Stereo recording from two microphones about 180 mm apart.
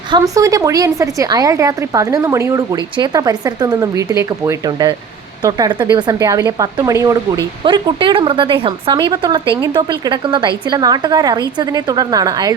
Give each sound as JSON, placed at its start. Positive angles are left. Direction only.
{"t": 0.1, "sound": "a woman's voice", "side_deg": -20}